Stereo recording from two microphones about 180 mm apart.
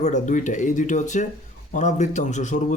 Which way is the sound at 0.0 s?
45° left (ahead or behind).